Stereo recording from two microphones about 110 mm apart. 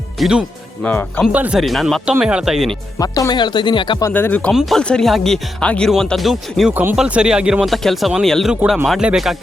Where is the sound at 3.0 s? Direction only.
35° left (ahead or behind).